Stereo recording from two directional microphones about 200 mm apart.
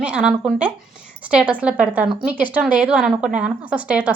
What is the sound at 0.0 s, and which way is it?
A woman's voice, 5° right (ahead or behind).